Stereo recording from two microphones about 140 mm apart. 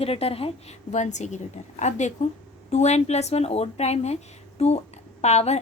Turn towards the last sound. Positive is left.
turn(degrees=50)  # may be behind; listen again after turning